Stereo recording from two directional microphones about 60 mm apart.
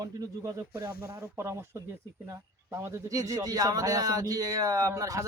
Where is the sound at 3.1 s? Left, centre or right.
Right.